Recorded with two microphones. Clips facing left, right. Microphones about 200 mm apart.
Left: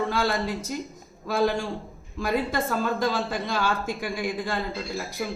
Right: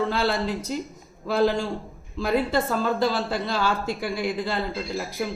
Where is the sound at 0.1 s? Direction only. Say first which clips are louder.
Right 1 dB; 15° left (ahead or behind).